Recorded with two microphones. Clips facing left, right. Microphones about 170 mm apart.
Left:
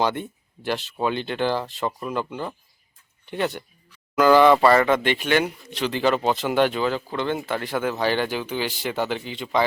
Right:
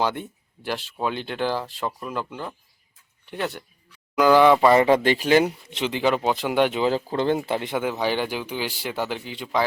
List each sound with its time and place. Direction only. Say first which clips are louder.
0.0 s speech: left 1 dB; 5° right (ahead or behind)
4.9 s speech: right 3 dB; 35° right (ahead or behind)
5.7 s speech: left 2 dB; 20° right (ahead or behind)
6.9 s speech: right 3 dB; 35° right (ahead or behind)
7.3 s speech: right 1 dB; 25° right (ahead or behind); by 9.6 s 5° right (ahead or behind)